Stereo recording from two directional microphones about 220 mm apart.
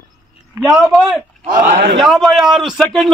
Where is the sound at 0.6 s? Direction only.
Centre (ahead or behind).